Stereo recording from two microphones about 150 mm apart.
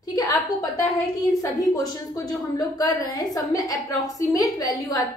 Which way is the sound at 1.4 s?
20° left (ahead or behind).